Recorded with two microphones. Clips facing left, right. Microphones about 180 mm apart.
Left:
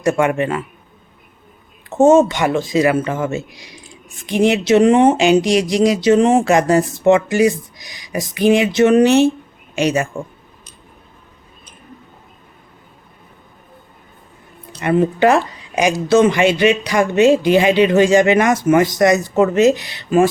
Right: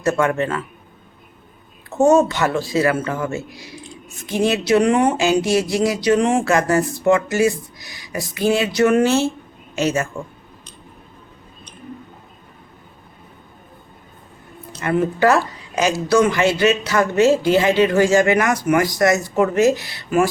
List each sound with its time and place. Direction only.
0.0 s a man's voice: 15° left (ahead or behind)
2.0 s a man's voice: 20° left (ahead or behind)
14.7 s speech: 15° left (ahead or behind)